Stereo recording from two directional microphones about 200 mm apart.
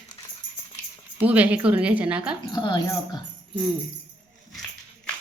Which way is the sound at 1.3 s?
5° right (ahead or behind).